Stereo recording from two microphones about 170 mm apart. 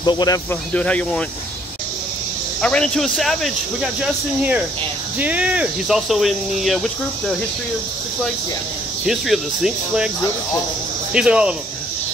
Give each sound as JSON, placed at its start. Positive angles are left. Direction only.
{"t": 0.0, "sound": "speech", "side_deg": 25}
{"t": 0.7, "sound": "speech", "side_deg": 5}
{"t": 2.6, "sound": "speech", "side_deg": 5}
{"t": 9.0, "sound": "speech", "side_deg": 0}
{"t": 11.1, "sound": "speech", "side_deg": -5}